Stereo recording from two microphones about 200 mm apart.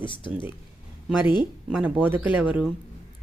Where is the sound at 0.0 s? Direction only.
25° left (ahead or behind).